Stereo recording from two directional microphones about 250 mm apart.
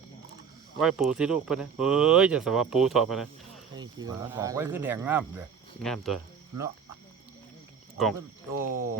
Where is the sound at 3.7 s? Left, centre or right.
Centre.